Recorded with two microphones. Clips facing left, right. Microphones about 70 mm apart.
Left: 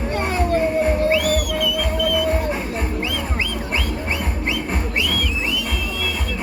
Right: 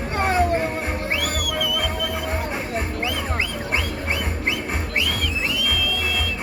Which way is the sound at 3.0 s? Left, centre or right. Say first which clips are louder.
Left 1 dB; right.